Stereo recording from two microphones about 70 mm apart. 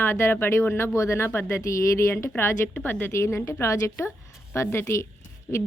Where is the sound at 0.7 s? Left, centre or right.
Left.